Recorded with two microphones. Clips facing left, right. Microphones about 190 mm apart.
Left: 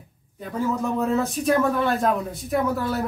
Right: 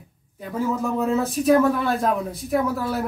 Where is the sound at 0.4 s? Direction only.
Centre (ahead or behind).